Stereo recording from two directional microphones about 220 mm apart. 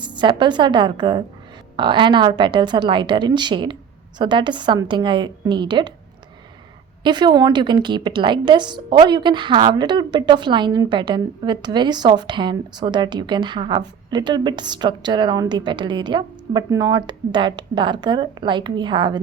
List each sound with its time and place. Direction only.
0.0 s a woman's voice: 20° right (ahead or behind)
7.0 s a woman's voice: 20° right (ahead or behind)